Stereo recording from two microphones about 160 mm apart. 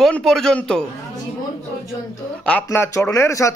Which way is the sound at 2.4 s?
10° left (ahead or behind).